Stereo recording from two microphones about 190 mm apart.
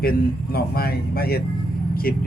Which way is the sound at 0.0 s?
50° left (ahead or behind).